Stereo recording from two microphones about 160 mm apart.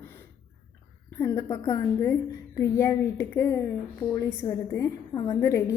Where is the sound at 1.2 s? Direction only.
20° left (ahead or behind).